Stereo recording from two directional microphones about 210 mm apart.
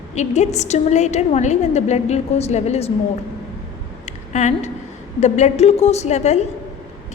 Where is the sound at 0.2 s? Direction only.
35° left (ahead or behind).